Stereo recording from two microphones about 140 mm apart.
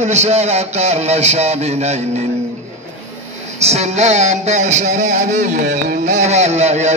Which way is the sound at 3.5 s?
50° right (ahead or behind).